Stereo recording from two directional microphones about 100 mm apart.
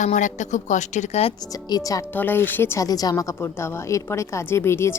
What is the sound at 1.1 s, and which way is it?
Speech, 90° left.